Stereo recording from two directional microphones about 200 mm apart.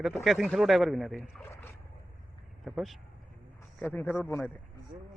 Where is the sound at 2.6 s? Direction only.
Centre (ahead or behind).